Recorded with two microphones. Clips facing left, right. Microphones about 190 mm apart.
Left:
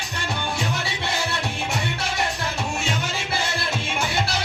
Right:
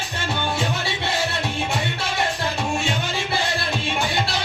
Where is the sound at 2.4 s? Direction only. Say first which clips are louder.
Right 3 dB; 30° right (ahead or behind).